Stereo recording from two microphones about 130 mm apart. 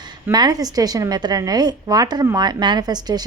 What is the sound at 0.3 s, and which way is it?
Speech, 30° right (ahead or behind).